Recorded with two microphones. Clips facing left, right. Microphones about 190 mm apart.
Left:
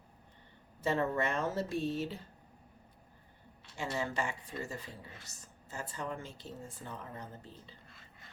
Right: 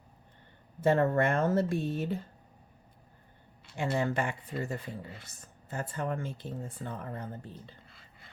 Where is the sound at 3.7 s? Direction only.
55° right (ahead or behind).